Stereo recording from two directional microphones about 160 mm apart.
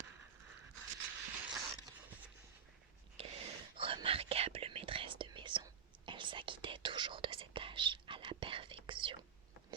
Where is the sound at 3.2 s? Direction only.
35° right (ahead or behind).